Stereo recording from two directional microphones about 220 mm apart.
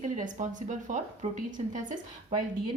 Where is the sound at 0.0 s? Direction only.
35° right (ahead or behind).